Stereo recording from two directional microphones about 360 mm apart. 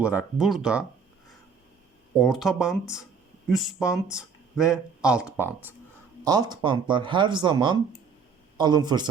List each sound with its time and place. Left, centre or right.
0.0 s speech: centre
2.1 s speech: centre